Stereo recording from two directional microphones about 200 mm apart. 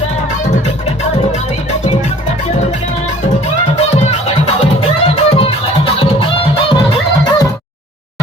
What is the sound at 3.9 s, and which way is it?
Music, 35° left (ahead or behind).